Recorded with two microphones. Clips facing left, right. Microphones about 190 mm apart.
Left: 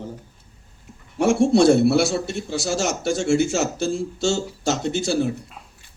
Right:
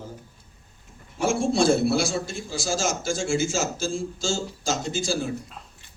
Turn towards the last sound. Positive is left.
turn(degrees=65)  # may be behind; listen again after turning